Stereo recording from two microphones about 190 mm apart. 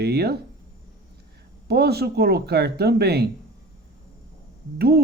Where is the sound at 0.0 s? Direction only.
55° right (ahead or behind).